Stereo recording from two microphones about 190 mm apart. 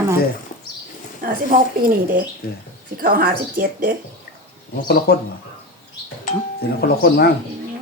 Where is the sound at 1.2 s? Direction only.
50° right (ahead or behind).